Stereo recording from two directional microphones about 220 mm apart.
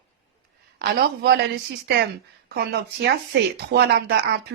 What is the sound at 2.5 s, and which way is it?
Speech, 50° right (ahead or behind).